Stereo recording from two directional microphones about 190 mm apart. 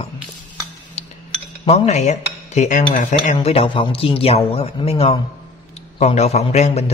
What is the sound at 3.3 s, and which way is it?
Speech, 30° left (ahead or behind).